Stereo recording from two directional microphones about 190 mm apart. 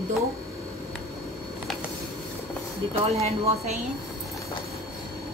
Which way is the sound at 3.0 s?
35° right (ahead or behind).